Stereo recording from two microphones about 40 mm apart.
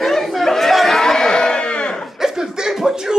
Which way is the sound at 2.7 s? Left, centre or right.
Centre.